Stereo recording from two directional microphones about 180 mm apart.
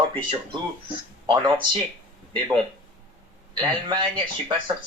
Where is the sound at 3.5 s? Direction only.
25° right (ahead or behind).